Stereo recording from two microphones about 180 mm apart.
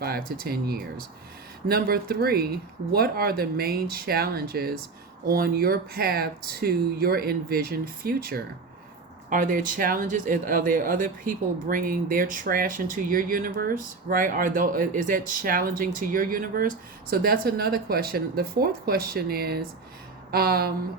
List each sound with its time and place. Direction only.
0.0 s speech: 55° right (ahead or behind)